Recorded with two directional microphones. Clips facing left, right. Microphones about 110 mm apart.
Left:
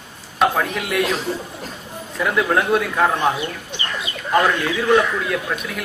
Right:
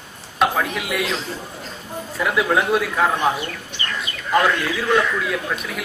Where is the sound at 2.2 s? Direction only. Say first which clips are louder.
Left 1 dB; centre (ahead or behind).